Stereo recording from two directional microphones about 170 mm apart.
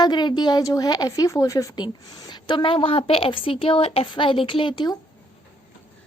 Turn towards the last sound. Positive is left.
turn(degrees=25)  # may be behind; listen again after turning